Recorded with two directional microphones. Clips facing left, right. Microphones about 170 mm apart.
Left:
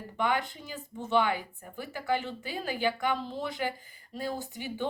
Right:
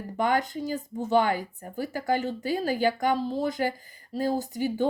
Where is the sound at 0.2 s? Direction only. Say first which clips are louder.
Right 5 dB; 40° right (ahead or behind).